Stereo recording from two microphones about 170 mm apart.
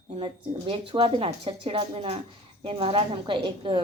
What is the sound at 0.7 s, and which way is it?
A woman's voice, 30° right (ahead or behind).